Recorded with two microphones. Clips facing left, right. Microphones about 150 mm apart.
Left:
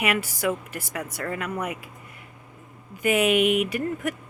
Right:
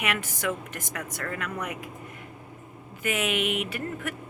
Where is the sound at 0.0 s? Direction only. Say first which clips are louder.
Left 5 dB; 10° left (ahead or behind).